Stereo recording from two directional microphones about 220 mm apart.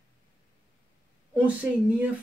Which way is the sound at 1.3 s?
5° right (ahead or behind).